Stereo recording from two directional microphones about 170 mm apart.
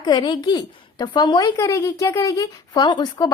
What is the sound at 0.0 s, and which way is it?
A woman's voice, 25° left (ahead or behind).